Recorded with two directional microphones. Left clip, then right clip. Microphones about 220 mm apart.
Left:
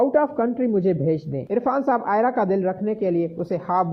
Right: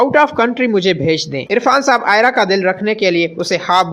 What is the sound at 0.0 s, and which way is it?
Speech, 25° right (ahead or behind).